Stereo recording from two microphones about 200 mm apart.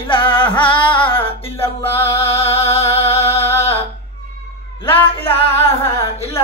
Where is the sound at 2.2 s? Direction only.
30° left (ahead or behind).